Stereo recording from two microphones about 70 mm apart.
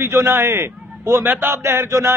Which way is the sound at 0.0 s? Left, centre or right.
Right.